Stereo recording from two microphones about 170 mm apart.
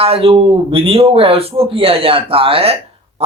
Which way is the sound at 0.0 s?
35° right (ahead or behind).